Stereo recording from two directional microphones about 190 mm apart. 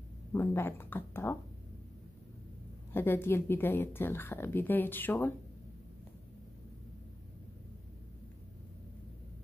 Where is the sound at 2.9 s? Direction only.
10° left (ahead or behind).